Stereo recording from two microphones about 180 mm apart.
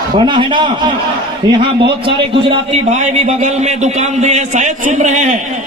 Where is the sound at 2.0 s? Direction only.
30° right (ahead or behind).